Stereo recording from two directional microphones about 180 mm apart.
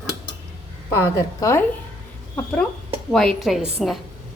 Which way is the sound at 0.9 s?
15° left (ahead or behind).